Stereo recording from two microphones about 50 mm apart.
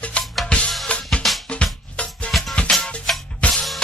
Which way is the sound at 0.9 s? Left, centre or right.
Left.